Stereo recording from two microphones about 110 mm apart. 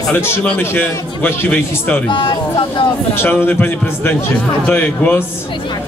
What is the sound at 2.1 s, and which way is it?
Speech, 50° left (ahead or behind).